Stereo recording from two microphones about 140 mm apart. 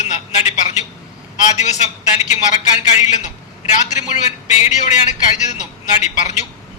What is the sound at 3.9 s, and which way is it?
A woman's voice, 55° left (ahead or behind).